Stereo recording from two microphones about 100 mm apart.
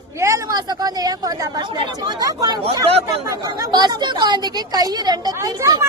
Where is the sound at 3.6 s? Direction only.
45° right (ahead or behind).